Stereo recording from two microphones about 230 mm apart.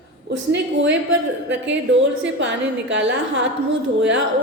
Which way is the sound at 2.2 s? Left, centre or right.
Right.